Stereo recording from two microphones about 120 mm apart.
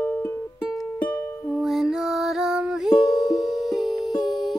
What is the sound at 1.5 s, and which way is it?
Music, 5° right (ahead or behind).